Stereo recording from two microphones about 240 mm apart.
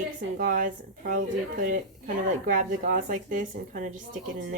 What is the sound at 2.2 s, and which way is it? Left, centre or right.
Speech, right.